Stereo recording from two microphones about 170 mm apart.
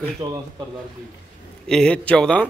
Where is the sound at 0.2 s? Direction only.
35° right (ahead or behind).